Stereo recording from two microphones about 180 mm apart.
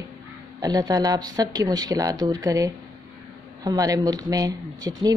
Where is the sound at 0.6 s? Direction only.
20° right (ahead or behind).